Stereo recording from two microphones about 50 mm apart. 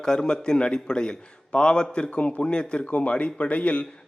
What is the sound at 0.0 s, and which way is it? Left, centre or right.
A man's voice, centre.